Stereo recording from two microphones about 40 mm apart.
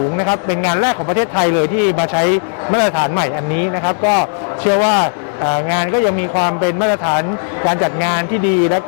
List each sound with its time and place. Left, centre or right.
0.4 s speech: centre
0.7 s speech: right
1.1 s a man's voice: centre
6.4 s a man's voice: centre
7.8 s speech: centre